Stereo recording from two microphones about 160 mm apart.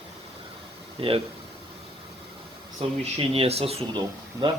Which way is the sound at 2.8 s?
35° right (ahead or behind).